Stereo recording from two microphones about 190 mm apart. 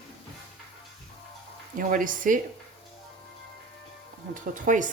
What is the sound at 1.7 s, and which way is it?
Speech, 45° right (ahead or behind).